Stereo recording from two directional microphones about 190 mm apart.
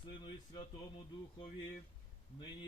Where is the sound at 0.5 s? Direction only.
25° left (ahead or behind).